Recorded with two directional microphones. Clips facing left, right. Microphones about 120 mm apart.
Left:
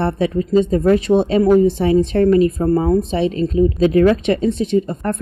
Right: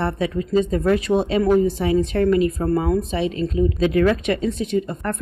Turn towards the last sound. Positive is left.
turn(degrees=30)  # may be behind; listen again after turning